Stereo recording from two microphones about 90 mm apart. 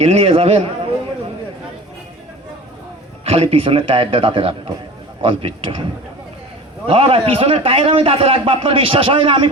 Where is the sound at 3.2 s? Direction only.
90° right.